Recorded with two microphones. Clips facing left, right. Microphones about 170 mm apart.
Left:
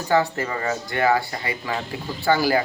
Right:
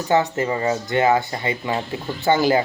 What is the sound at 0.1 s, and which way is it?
Speech, 20° right (ahead or behind).